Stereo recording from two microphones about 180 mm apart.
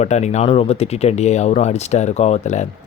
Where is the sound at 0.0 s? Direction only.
40° left (ahead or behind).